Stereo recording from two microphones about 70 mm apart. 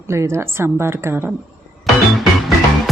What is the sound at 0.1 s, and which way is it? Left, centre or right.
Speech, right.